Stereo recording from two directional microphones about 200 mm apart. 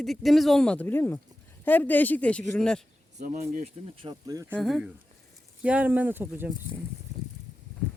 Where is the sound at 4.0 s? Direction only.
20° right (ahead or behind).